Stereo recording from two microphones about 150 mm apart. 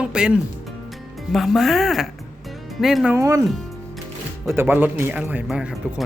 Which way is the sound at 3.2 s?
20° right (ahead or behind).